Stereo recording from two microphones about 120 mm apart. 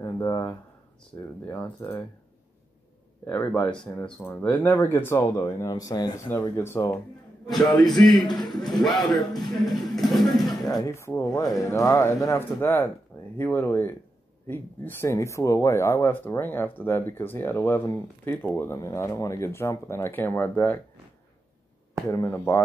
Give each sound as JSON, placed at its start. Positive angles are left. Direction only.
{"t": 0.0, "sound": "speech", "side_deg": 30}
{"t": 1.4, "sound": "speech", "side_deg": 15}
{"t": 3.3, "sound": "speech", "side_deg": 15}
{"t": 6.5, "sound": "speech", "side_deg": 20}
{"t": 7.6, "sound": "a man's voice", "side_deg": 35}
{"t": 9.9, "sound": "speech", "side_deg": 0}
{"t": 10.6, "sound": "speech", "side_deg": 30}
{"t": 22.1, "sound": "speech", "side_deg": 20}